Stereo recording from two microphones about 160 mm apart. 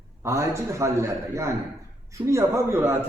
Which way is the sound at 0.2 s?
20° right (ahead or behind).